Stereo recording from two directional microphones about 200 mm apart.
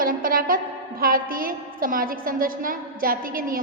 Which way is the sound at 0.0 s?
45° right (ahead or behind).